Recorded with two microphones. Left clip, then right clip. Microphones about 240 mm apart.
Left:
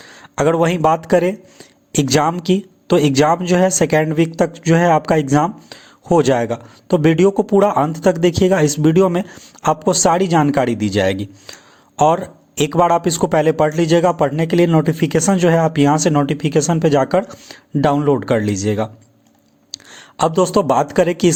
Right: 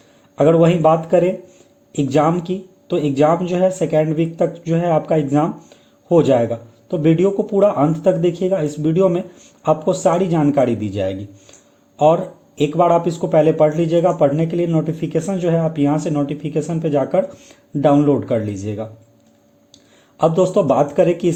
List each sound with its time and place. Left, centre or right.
0.2 s speech: left
20.0 s speech: left